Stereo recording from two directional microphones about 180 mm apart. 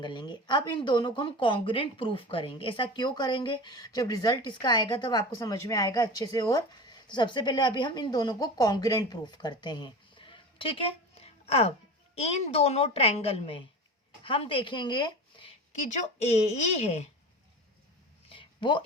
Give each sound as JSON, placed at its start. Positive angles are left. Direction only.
{"t": 0.0, "sound": "speech", "side_deg": 25}
{"t": 15.7, "sound": "speech", "side_deg": 40}
{"t": 18.3, "sound": "a sound", "side_deg": 25}